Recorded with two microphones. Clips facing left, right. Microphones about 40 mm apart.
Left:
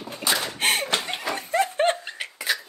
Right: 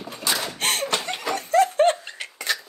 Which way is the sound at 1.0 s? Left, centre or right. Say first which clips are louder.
Right 1 dB; centre.